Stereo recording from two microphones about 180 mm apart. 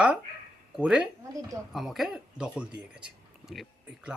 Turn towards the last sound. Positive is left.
turn(degrees=-5)  # may be behind; listen again after turning